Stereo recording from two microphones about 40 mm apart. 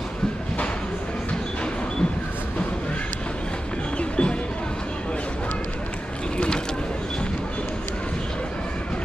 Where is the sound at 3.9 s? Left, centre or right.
Left.